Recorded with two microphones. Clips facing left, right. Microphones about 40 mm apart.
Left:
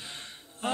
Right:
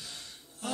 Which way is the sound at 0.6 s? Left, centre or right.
Left.